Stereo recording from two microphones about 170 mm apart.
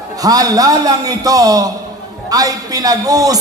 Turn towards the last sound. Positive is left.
turn(degrees=-20)  # may be behind; listen again after turning